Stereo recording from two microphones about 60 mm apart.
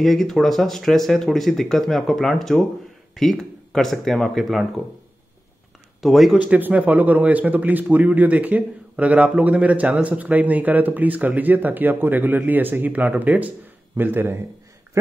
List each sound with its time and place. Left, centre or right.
0.0 s speech: centre
5.9 s speech: centre
6.3 s a man's voice: right